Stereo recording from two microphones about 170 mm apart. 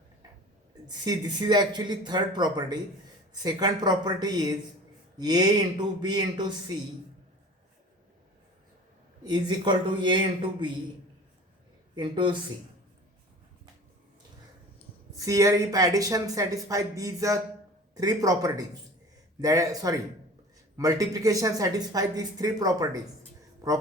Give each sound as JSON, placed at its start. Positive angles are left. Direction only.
{"t": 0.9, "sound": "speech", "side_deg": -25}
{"t": 9.2, "sound": "speech", "side_deg": -25}
{"t": 11.9, "sound": "speech", "side_deg": -30}
{"t": 15.2, "sound": "speech", "side_deg": -20}